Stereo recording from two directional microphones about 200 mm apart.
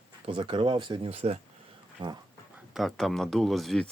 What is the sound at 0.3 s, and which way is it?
Speech, 25° right (ahead or behind).